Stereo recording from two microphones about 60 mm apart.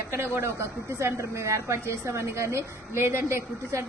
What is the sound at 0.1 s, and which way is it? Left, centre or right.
A woman's voice, right.